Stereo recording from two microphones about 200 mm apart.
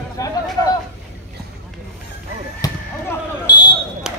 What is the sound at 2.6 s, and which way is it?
Fire alarm, 20° left (ahead or behind).